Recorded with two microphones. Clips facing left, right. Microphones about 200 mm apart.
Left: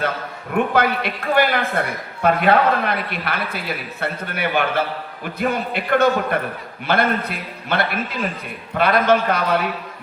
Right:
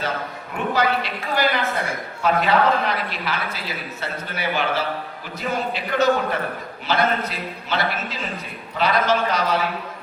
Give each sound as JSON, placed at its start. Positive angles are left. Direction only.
{"t": 0.5, "sound": "speech", "side_deg": 55}